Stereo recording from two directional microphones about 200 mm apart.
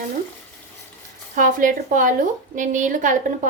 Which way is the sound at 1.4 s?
45° right (ahead or behind).